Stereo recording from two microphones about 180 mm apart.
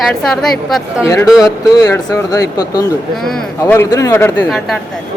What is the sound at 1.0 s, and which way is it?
A man's voice, 20° left (ahead or behind).